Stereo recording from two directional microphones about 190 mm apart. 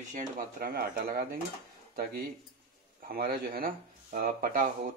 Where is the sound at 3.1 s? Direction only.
50° right (ahead or behind).